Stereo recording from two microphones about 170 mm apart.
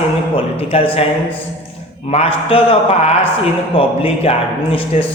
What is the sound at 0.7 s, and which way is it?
Speech, 35° left (ahead or behind).